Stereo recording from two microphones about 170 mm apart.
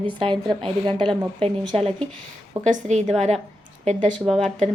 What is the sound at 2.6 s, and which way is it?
Speech, 50° right (ahead or behind).